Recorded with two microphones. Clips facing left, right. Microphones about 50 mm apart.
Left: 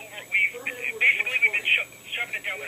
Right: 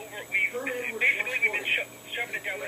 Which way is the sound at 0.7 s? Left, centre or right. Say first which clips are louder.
Left 3 dB; left.